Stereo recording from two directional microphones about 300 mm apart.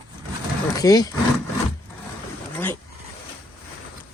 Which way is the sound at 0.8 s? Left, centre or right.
Centre.